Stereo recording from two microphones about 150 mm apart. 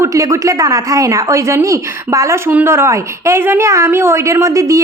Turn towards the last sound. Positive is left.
turn(degrees=-20)  # may be behind; listen again after turning